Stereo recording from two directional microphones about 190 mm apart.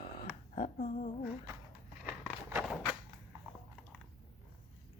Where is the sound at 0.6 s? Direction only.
40° left (ahead or behind).